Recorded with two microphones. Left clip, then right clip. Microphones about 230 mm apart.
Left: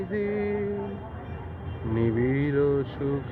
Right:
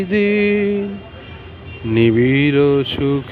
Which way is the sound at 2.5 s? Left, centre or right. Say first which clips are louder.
Right 10 dB; right.